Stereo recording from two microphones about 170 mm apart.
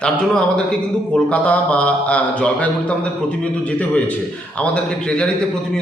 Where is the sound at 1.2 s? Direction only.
5° left (ahead or behind).